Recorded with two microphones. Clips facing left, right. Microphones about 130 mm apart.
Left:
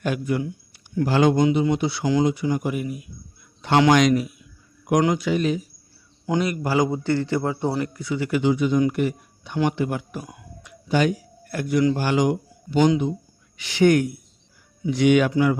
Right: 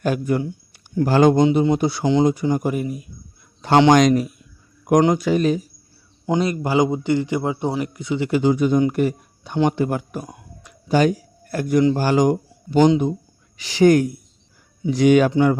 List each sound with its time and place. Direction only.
0.0 s speech: 40° right (ahead or behind)
1.0 s speech: 45° right (ahead or behind)
6.2 s a man's voice: 25° right (ahead or behind)
8.4 s a man's voice: 45° right (ahead or behind)